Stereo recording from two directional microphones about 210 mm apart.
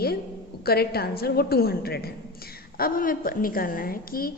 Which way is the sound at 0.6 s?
50° left (ahead or behind).